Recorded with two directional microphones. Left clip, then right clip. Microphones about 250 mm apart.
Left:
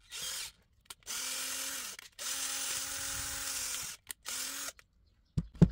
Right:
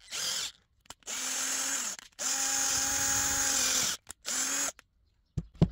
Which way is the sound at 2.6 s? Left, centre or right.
Right.